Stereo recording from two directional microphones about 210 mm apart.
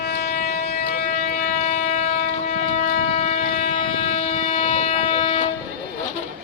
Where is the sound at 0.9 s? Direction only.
40° left (ahead or behind).